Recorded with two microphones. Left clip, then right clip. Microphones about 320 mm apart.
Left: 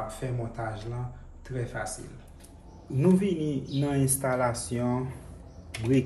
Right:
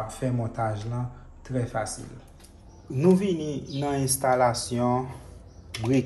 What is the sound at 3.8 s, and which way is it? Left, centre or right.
Speech, right.